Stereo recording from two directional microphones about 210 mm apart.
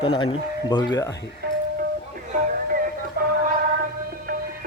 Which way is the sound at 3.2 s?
45° right (ahead or behind).